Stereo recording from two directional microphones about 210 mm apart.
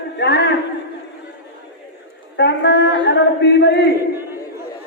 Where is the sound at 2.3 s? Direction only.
55° left (ahead or behind).